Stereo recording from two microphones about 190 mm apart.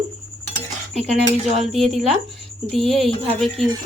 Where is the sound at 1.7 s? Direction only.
Centre (ahead or behind).